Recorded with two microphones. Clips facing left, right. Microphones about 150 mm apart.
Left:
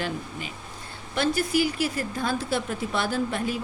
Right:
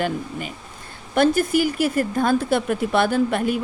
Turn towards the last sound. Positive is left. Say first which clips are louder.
# right 7 dB
turn(degrees=-60)  # may be behind; listen again after turning